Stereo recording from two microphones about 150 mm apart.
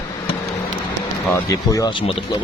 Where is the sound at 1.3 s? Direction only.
25° left (ahead or behind).